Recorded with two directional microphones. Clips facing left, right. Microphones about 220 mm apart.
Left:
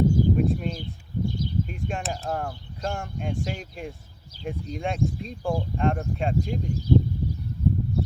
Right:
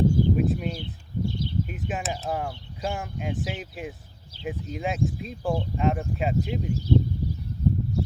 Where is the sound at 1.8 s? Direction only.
Centre (ahead or behind).